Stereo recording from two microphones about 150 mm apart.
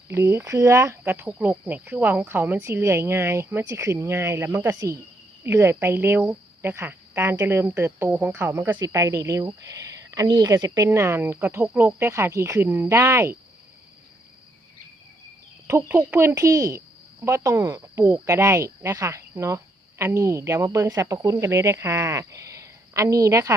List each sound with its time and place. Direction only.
0.1 s a woman's voice: 20° right (ahead or behind)
15.6 s speech: 15° right (ahead or behind)